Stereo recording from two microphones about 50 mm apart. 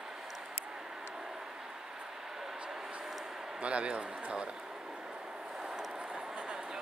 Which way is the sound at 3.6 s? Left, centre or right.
Right.